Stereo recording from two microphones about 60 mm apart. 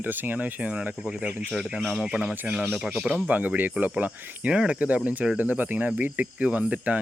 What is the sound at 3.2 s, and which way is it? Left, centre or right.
Speech, right.